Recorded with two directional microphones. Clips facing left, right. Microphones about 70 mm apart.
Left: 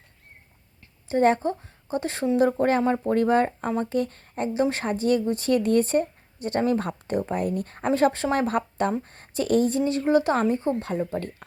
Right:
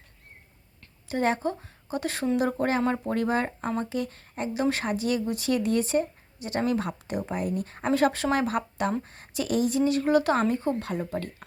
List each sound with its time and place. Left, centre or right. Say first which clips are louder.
1.0 s speech: left 5 dB; left
7.9 s speech: left 2 dB; left
10.0 s speech: left 4 dB; left
10.9 s speech: left 3 dB; centre